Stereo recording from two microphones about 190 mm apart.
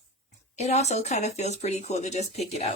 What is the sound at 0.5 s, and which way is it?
Speech, 35° left (ahead or behind).